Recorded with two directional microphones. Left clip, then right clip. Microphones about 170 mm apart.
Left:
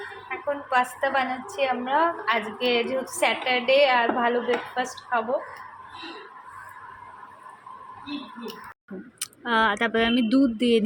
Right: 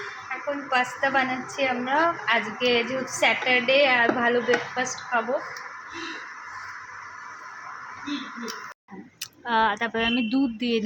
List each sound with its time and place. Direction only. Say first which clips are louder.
0.7 s a woman's voice: even; 10° left (ahead or behind)
9.5 s speech: left 1 dB; 15° left (ahead or behind)